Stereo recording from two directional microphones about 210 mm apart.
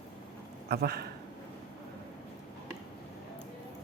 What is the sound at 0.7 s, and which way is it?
Speech, 50° right (ahead or behind).